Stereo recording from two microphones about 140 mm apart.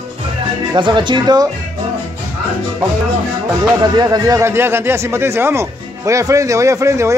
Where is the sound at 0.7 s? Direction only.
35° right (ahead or behind).